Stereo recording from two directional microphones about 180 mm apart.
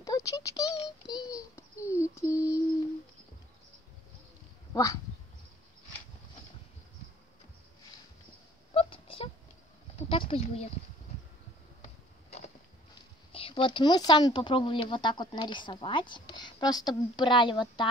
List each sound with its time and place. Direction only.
0.0 s child singing: 20° left (ahead or behind)
4.7 s speech: 20° left (ahead or behind)
8.7 s a sound: 30° left (ahead or behind)
13.3 s speech: 30° left (ahead or behind)